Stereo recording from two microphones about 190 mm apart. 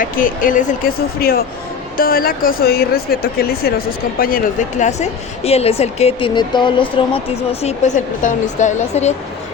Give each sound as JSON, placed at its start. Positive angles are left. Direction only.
{"t": 0.0, "sound": "speech", "side_deg": 45}
{"t": 4.8, "sound": "a woman's voice", "side_deg": 35}